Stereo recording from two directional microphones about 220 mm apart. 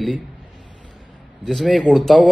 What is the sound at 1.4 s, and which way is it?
Speech, centre (ahead or behind).